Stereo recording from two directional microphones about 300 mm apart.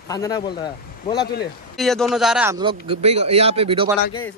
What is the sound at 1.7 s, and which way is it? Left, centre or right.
Speech, centre.